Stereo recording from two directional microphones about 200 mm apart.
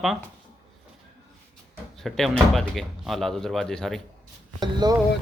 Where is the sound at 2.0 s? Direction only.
Centre (ahead or behind).